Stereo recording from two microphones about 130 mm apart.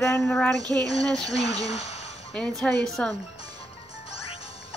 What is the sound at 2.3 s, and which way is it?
Speech, 5° left (ahead or behind).